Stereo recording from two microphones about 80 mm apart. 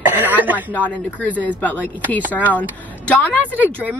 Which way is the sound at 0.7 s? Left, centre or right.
Centre.